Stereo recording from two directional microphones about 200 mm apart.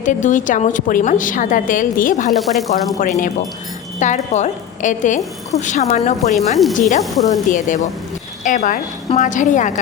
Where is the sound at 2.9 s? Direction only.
45° left (ahead or behind).